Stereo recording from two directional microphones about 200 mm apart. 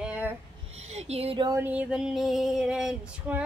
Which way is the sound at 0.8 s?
35° right (ahead or behind).